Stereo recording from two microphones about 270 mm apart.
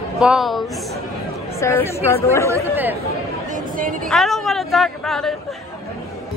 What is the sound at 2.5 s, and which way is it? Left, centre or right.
Speech, centre.